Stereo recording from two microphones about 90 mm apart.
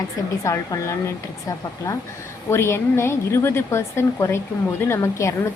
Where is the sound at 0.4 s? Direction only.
35° left (ahead or behind).